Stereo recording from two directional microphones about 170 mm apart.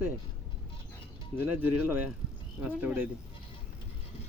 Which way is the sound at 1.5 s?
10° right (ahead or behind).